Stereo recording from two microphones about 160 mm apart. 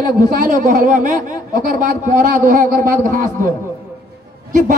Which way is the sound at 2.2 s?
55° right (ahead or behind).